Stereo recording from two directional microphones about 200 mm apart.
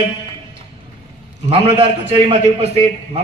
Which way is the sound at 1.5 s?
30° right (ahead or behind).